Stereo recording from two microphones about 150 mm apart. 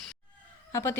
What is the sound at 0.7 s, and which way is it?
Speech, 20° left (ahead or behind).